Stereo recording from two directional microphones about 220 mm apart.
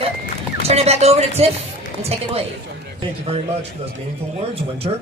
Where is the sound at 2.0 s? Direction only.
25° right (ahead or behind).